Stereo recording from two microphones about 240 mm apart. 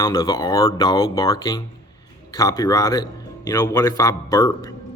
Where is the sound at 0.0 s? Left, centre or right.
Centre.